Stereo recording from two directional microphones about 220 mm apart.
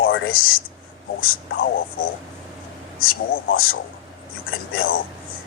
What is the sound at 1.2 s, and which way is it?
Speech, 40° left (ahead or behind).